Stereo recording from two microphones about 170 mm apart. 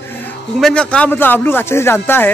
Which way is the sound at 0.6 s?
5° left (ahead or behind).